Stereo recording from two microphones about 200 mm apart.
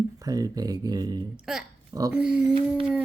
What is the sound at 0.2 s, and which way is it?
Speech, 20° right (ahead or behind).